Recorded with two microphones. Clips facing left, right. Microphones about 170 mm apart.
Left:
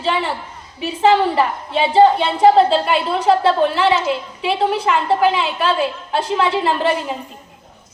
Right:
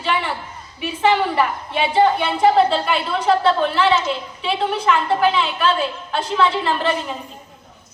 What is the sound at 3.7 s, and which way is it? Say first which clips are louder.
A woman's voice: left 1 dB; 15° left (ahead or behind).